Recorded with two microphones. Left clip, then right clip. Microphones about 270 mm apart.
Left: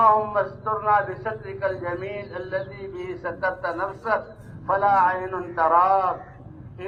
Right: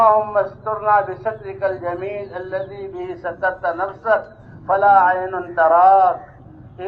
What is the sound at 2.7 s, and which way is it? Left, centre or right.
Speech, left.